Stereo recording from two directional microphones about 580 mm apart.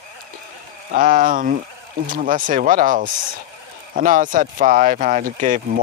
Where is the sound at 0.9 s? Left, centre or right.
Centre.